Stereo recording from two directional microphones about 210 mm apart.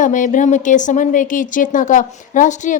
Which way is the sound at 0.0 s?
35° left (ahead or behind).